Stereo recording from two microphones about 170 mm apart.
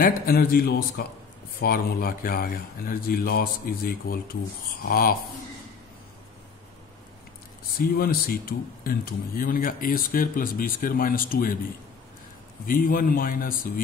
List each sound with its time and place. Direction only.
0.0 s speech: 60° left (ahead or behind)
8.0 s speech: 60° left (ahead or behind)
12.6 s speech: 55° left (ahead or behind)